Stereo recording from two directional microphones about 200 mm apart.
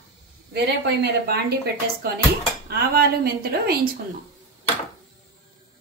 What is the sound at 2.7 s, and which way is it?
A woman's voice, 50° right (ahead or behind).